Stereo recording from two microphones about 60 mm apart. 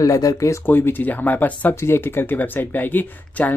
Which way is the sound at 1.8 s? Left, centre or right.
Left.